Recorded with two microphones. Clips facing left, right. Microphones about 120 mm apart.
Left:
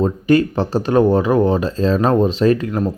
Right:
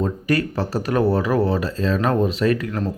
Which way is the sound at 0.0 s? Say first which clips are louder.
Left 7 dB; 25° left (ahead or behind).